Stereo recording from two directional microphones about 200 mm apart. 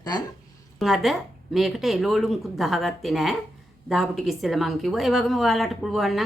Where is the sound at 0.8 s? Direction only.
Centre (ahead or behind).